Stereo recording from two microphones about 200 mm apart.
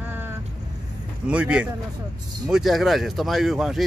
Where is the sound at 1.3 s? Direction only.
5° right (ahead or behind).